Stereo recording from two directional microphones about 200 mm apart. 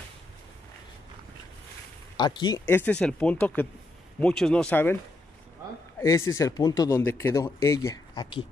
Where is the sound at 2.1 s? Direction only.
20° left (ahead or behind).